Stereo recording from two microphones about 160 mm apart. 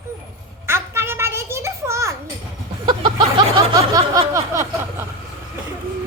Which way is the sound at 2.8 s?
30° right (ahead or behind).